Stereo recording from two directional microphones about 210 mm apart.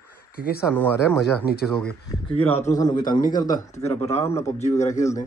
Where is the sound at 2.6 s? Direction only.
35° left (ahead or behind).